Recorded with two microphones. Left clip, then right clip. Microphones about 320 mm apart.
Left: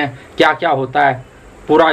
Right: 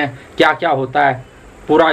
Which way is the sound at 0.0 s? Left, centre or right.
Centre.